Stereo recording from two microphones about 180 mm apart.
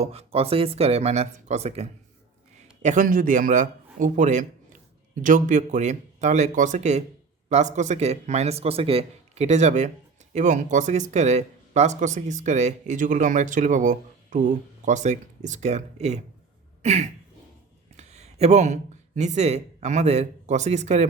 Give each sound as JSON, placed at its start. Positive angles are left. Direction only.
{"t": 0.0, "sound": "speech", "side_deg": -35}
{"t": 2.8, "sound": "speech", "side_deg": -45}
{"t": 16.8, "sound": "a sound", "side_deg": -40}
{"t": 17.9, "sound": "speech", "side_deg": -35}